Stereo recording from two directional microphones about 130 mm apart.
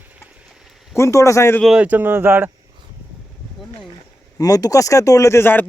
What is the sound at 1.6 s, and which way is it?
Speech, 10° right (ahead or behind).